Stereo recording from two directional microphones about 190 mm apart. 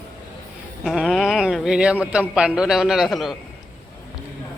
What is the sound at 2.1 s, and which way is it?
A man's voice, 5° right (ahead or behind).